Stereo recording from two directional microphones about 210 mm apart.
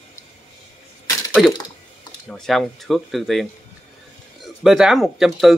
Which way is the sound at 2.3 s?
Centre (ahead or behind).